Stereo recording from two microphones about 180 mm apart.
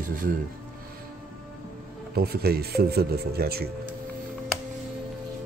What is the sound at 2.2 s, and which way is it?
Speech, 60° right (ahead or behind).